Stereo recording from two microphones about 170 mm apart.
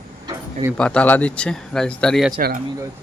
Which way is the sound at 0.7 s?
5° left (ahead or behind).